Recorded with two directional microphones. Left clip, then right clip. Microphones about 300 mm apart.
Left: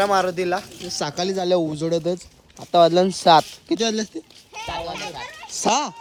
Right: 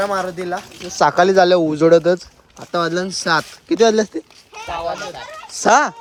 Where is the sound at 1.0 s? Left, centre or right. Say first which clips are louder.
Right 13 dB; centre.